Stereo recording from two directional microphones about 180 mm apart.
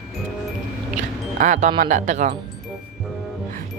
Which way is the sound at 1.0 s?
45° right (ahead or behind).